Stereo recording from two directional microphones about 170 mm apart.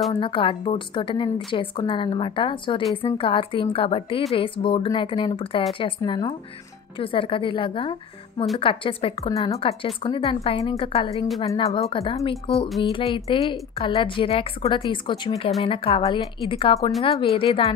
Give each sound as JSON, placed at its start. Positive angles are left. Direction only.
{"t": 0.1, "sound": "a woman's voice", "side_deg": 30}